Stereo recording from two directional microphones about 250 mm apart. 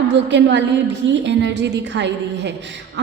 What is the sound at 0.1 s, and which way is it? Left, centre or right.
A woman's voice, right.